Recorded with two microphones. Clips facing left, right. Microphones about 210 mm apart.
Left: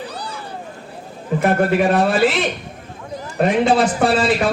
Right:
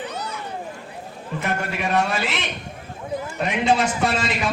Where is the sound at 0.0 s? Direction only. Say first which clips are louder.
Left 1 dB; 35° left (ahead or behind).